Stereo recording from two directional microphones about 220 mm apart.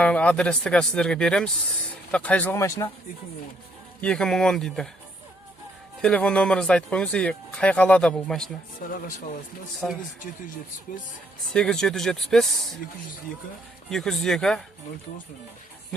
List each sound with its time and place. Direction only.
0.0 s speech: 5° left (ahead or behind)
4.0 s speech: 5° left (ahead or behind)
6.0 s speech: 5° left (ahead or behind)
8.8 s speech: 40° left (ahead or behind)
9.8 s speech: centre (ahead or behind)
11.5 s speech: 5° left (ahead or behind)
13.9 s speech: centre (ahead or behind)